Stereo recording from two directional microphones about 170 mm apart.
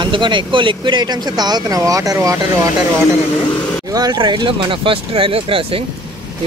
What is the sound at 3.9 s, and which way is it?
Speech, 25° right (ahead or behind).